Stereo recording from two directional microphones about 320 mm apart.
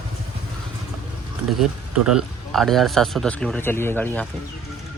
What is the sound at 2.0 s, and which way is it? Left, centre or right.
Speech, centre.